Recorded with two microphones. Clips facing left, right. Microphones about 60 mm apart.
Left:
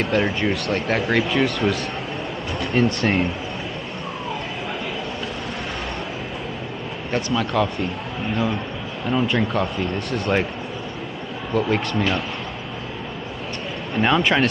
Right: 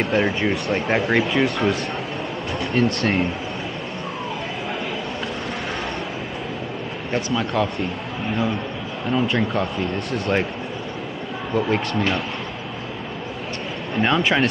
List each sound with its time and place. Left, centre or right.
0.0 s speech: centre
7.1 s speech: centre
9.1 s speech: centre
11.5 s speech: centre
14.0 s speech: centre